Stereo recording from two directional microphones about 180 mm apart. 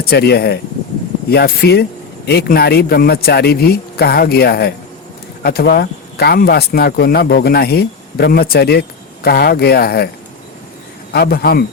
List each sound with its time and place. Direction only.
0.0 s speech: 60° left (ahead or behind)
11.1 s speech: 60° left (ahead or behind)